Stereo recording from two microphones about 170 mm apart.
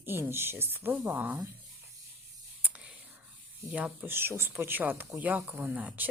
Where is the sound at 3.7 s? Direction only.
5° right (ahead or behind).